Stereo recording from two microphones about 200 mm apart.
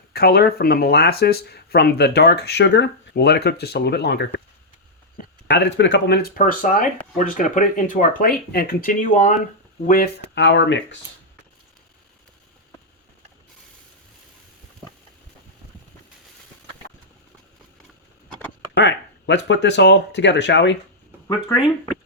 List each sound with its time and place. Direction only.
0.1 s speech: 50° left (ahead or behind)
10.3 s speech: 65° left (ahead or behind)
18.8 s speech: 65° left (ahead or behind)